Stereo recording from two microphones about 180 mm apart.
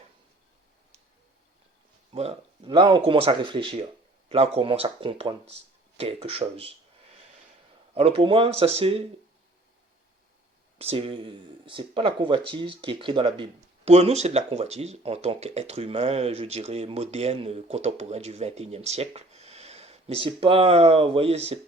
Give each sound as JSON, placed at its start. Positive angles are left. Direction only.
{"t": 2.1, "sound": "speech", "side_deg": -35}
{"t": 7.9, "sound": "speech", "side_deg": -30}
{"t": 10.8, "sound": "speech", "side_deg": -35}